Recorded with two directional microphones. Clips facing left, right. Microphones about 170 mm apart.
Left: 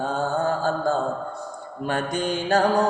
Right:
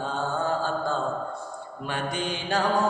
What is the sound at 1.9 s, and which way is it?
Mantra, 45° left (ahead or behind).